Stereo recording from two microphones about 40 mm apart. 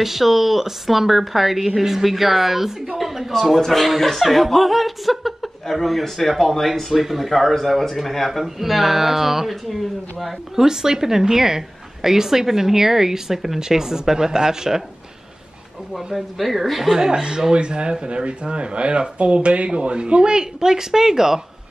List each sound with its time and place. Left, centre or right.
0.0 s speech: centre
16.1 s speech: centre
16.9 s speech: centre